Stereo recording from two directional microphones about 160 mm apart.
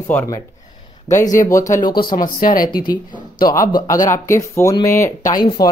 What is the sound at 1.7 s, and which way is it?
Speech, 60° left (ahead or behind).